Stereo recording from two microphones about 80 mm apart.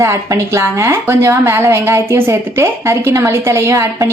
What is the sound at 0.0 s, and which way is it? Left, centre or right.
Speech, right.